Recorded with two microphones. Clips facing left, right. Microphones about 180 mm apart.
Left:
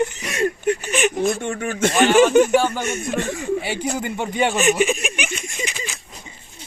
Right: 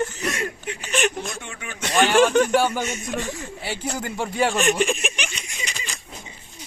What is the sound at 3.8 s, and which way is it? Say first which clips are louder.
Speech: left 3 dB; 10° left (ahead or behind).